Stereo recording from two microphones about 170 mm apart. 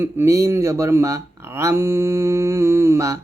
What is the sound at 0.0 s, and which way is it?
Speech, 15° right (ahead or behind).